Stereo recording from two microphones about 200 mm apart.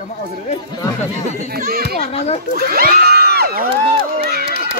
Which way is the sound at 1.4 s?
50° right (ahead or behind).